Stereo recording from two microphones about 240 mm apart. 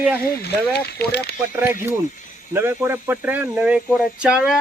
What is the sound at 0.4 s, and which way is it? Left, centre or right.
Speech, left.